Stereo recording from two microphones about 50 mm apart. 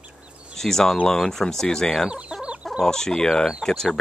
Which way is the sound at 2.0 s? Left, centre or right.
Right.